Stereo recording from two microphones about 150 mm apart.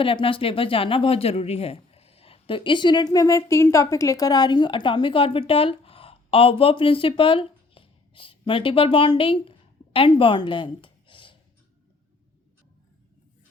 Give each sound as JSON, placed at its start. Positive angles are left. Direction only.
{"t": 0.0, "sound": "a woman's voice", "side_deg": 35}